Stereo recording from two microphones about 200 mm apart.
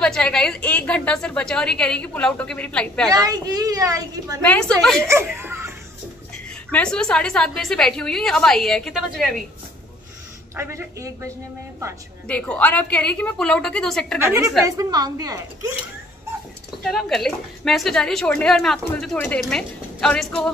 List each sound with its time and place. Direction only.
0.0 s a woman's voice: 5° left (ahead or behind)
3.1 s a woman's voice: 20° right (ahead or behind)
4.4 s a woman's voice: 5° left (ahead or behind)
5.0 s speech: 10° right (ahead or behind)
6.5 s a woman's voice: 5° left (ahead or behind)
10.5 s a woman's voice: 15° right (ahead or behind)
12.3 s a woman's voice: 5° left (ahead or behind)
14.2 s a woman's voice: 15° right (ahead or behind)
16.8 s a woman's voice: centre (ahead or behind)